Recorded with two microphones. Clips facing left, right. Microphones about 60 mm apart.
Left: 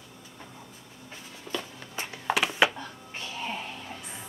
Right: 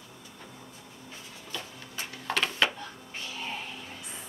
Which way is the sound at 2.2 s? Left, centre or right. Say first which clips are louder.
Left 4 dB; centre.